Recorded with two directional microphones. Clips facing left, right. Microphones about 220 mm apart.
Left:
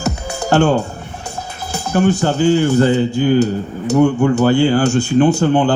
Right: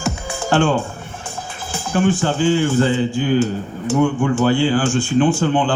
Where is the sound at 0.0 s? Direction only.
40° left (ahead or behind).